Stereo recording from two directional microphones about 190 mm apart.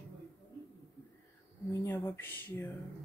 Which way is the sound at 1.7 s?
15° left (ahead or behind).